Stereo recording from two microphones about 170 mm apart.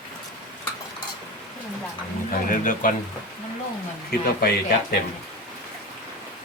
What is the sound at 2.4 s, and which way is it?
Speech, 50° left (ahead or behind).